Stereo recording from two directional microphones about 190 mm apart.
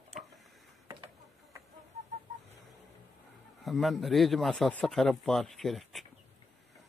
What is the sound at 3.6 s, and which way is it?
Speech, centre (ahead or behind).